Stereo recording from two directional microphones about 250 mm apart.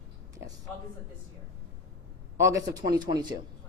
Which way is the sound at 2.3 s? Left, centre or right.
Centre.